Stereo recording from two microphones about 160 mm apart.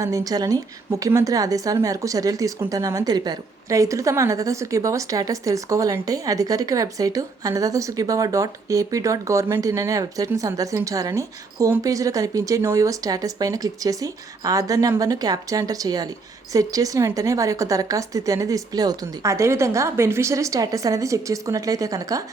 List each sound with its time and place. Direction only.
0.0 s a woman's voice: 20° right (ahead or behind)